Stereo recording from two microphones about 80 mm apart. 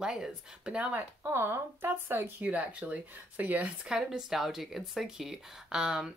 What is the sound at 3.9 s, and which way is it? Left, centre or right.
Speech, centre.